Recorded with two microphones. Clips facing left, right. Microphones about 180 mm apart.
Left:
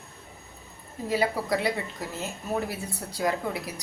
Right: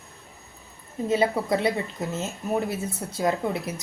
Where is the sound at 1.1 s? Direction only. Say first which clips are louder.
Right 3 dB; 25° right (ahead or behind).